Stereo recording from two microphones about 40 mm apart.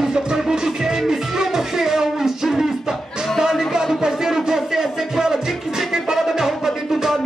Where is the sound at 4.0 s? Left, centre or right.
Centre.